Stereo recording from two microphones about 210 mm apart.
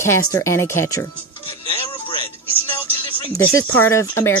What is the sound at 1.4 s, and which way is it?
Music, 25° left (ahead or behind).